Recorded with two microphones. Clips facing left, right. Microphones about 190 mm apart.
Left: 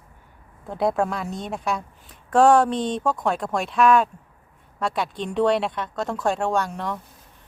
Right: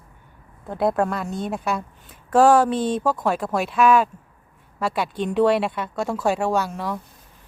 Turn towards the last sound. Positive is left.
turn(degrees=-5)  # may be behind; listen again after turning